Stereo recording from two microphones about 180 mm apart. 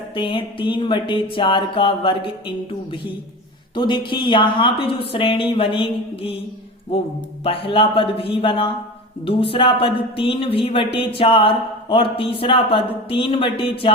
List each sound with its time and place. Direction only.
0.2 s speech: 30° left (ahead or behind)
3.8 s speech: 25° left (ahead or behind)
7.4 s a man's voice: 30° left (ahead or behind)